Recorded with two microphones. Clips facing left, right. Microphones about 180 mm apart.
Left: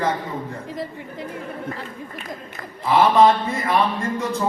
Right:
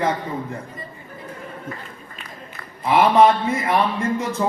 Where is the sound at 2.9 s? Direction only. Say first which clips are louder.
Even; 20° right (ahead or behind).